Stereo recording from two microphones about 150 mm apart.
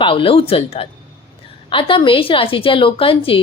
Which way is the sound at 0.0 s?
35° left (ahead or behind).